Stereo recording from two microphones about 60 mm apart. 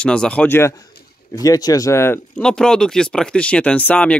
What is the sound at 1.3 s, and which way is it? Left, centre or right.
Speech, left.